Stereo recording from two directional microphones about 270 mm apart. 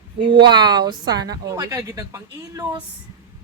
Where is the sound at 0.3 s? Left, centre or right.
Centre.